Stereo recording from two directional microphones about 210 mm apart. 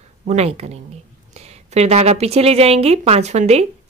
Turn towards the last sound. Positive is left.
turn(degrees=-30)  # may be behind; listen again after turning